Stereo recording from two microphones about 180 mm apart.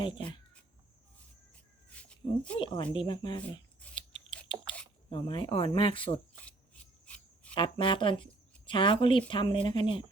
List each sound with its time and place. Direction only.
0.0 s speech: 25° left (ahead or behind)
2.0 s cat: 5° left (ahead or behind)
2.6 s speech: 25° left (ahead or behind)
3.9 s scissors: 25° left (ahead or behind)
5.1 s speech: 30° left (ahead or behind)
7.0 s a sound: 5° left (ahead or behind)
7.5 s speech: 25° left (ahead or behind)